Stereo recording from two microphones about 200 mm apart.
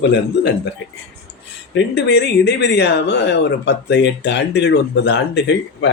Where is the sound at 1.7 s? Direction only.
60° left (ahead or behind).